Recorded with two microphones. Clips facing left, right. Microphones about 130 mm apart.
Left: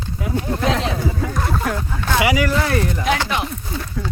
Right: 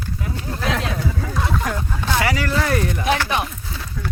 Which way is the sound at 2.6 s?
Centre (ahead or behind).